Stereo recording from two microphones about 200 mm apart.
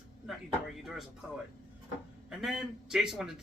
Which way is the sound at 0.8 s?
Centre (ahead or behind).